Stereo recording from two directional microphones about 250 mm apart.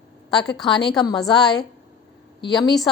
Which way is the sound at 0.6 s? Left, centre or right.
Centre.